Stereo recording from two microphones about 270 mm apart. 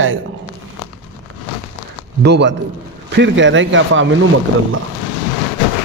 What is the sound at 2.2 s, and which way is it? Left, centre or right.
A man's voice, right.